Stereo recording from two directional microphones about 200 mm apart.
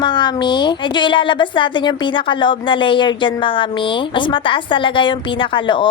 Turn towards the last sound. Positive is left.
turn(degrees=25)  # may be behind; listen again after turning